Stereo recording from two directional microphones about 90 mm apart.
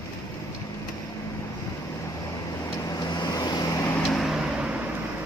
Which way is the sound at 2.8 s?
50° left (ahead or behind).